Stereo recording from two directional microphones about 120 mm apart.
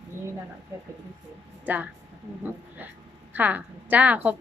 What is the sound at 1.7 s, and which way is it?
Speech, 15° right (ahead or behind).